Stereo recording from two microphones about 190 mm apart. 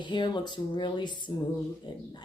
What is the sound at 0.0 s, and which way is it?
Speech, 25° left (ahead or behind).